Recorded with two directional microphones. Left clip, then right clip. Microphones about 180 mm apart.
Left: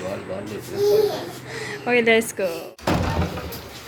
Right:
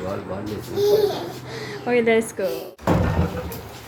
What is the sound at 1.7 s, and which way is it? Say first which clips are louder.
Speech: left 1 dB; 5° right (ahead or behind).